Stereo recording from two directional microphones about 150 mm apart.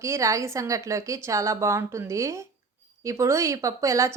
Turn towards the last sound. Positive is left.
turn(degrees=-20)  # may be behind; listen again after turning